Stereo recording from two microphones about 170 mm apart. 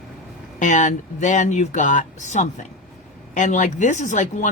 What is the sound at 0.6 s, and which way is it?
Speech, 45° left (ahead or behind).